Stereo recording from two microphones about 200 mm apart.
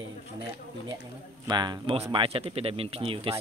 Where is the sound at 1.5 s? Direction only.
20° right (ahead or behind).